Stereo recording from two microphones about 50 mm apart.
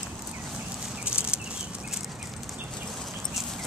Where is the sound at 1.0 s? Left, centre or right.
Right.